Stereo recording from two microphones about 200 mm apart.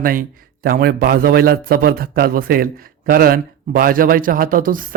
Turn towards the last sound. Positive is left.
turn(degrees=-45)  # may be behind; listen again after turning